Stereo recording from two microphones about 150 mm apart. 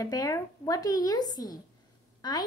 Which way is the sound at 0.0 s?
25° left (ahead or behind).